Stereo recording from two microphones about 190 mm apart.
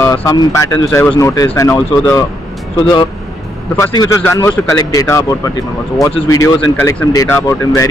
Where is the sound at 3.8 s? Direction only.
15° left (ahead or behind).